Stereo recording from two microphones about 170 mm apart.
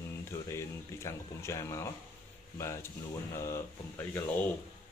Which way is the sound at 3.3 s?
15° left (ahead or behind).